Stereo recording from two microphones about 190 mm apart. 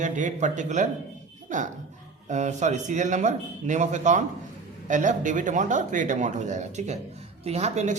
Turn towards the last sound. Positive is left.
turn(degrees=-40)  # may be behind; listen again after turning